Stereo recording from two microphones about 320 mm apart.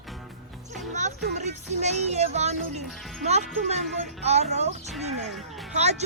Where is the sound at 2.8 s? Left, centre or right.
Centre.